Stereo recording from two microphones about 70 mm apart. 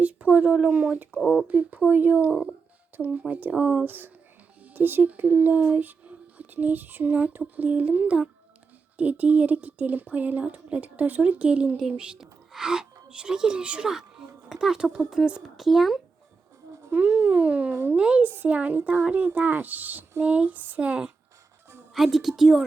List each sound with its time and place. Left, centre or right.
0.0 s a woman's voice: right
3.8 s speech: right; by 16.0 s centre
16.9 s a woman's voice: right
21.9 s a woman's voice: centre